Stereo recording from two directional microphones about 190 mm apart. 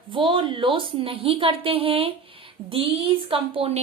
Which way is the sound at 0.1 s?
25° right (ahead or behind).